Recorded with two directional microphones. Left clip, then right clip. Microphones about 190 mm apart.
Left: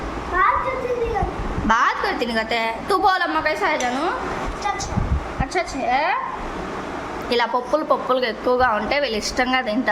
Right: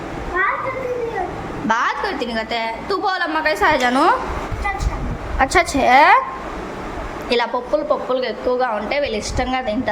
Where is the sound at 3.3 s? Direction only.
15° right (ahead or behind).